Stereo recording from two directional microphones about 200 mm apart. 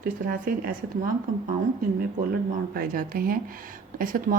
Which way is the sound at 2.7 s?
45° right (ahead or behind).